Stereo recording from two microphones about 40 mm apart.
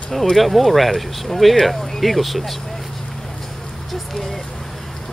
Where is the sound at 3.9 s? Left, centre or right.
Centre.